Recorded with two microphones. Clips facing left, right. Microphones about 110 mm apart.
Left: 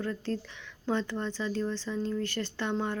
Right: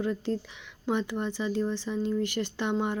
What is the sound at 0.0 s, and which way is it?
A woman's voice, 15° right (ahead or behind).